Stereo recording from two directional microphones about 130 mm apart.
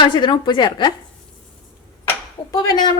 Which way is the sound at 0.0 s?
35° left (ahead or behind).